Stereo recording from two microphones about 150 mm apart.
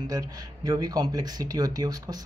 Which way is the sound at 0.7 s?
25° right (ahead or behind).